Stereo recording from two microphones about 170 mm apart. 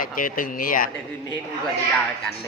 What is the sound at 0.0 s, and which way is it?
Speech, 55° left (ahead or behind).